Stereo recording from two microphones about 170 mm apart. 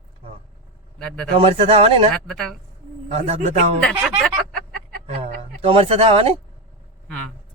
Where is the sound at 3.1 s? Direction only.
40° right (ahead or behind).